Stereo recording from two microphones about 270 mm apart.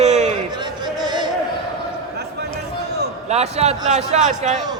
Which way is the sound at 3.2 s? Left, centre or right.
Right.